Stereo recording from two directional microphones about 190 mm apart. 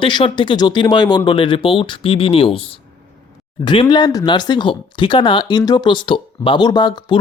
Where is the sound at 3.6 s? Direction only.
25° left (ahead or behind).